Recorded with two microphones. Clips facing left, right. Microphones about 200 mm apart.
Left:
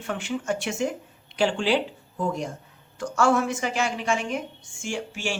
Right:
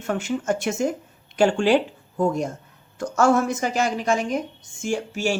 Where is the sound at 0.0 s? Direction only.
45° right (ahead or behind).